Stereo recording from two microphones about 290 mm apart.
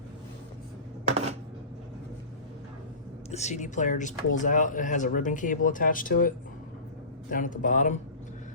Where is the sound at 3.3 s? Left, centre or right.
Left.